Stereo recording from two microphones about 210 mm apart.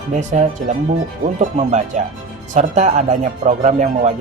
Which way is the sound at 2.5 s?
35° right (ahead or behind).